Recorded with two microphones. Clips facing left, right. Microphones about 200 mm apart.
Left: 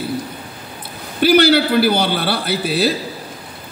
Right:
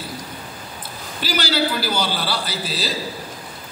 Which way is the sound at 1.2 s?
60° left (ahead or behind).